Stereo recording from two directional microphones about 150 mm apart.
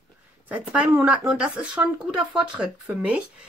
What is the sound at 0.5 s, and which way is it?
A woman's voice, 10° right (ahead or behind).